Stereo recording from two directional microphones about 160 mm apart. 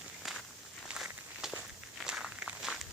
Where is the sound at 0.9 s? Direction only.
Centre (ahead or behind).